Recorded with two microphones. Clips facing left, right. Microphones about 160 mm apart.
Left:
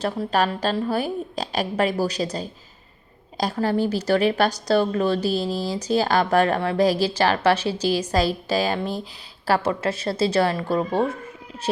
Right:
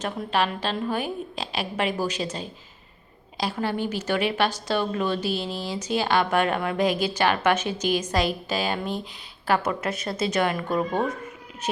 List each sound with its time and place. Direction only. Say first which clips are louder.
0.0 s speech: left 3 dB; 35° left (ahead or behind)